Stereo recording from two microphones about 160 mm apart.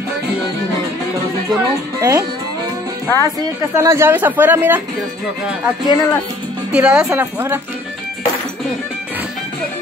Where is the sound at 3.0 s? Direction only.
15° left (ahead or behind).